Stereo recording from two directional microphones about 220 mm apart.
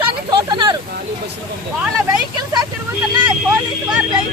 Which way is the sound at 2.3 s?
20° right (ahead or behind).